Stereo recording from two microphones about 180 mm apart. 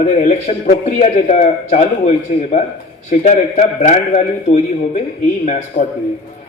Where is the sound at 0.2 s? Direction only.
40° left (ahead or behind).